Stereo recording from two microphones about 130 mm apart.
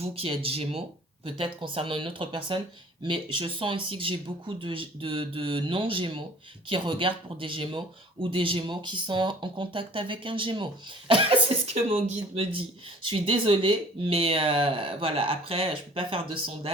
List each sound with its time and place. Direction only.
0.0 s speech: 45° right (ahead or behind)